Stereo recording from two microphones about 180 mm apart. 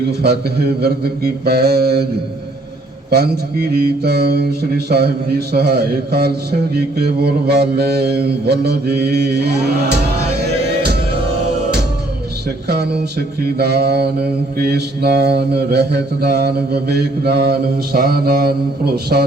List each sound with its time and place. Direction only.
0.2 s mantra: 60° right (ahead or behind)
3.1 s mantra: 60° right (ahead or behind)
12.6 s mantra: 65° right (ahead or behind)